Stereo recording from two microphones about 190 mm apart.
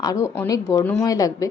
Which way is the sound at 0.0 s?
15° left (ahead or behind).